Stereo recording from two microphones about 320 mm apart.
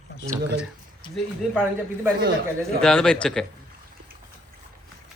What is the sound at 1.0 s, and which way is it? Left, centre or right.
Speech, centre.